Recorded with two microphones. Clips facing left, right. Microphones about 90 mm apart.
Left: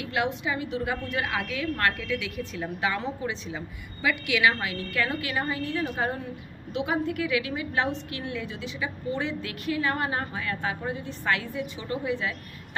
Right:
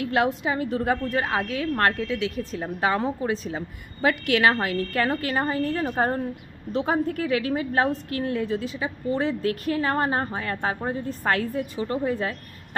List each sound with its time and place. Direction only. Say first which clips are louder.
0.0 s a woman's voice: right 5 dB; 40° right (ahead or behind)